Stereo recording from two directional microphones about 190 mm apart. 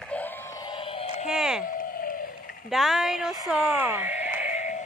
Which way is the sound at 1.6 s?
45° left (ahead or behind).